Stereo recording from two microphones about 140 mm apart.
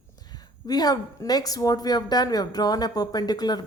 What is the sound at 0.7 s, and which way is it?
A woman's voice, 25° left (ahead or behind).